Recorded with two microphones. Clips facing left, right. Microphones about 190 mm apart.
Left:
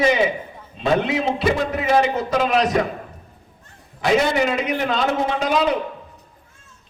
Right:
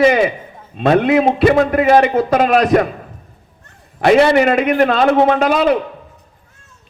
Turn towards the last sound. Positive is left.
turn(degrees=-60)  # may be behind; listen again after turning